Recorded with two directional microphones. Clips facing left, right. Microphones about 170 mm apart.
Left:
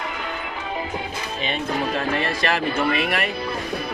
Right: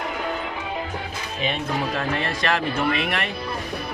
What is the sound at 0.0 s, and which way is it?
Music, 40° right (ahead or behind).